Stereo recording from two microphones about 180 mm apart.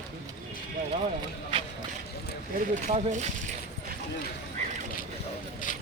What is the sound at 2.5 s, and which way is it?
Speech, 45° right (ahead or behind).